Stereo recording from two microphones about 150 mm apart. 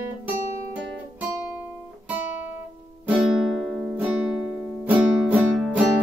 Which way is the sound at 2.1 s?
10° right (ahead or behind).